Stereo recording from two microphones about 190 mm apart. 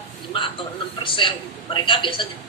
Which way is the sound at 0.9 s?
25° left (ahead or behind).